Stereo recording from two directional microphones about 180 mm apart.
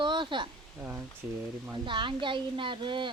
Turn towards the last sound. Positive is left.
turn(degrees=-25)  # may be behind; listen again after turning